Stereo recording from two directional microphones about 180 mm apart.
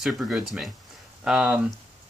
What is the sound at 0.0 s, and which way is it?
Speech, 5° right (ahead or behind).